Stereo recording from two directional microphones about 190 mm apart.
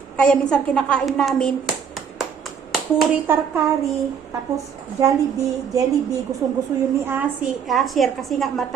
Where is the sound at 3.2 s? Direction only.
10° right (ahead or behind).